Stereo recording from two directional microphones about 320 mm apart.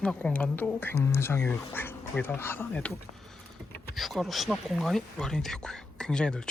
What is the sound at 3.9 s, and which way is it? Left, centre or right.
A woman's voice, centre.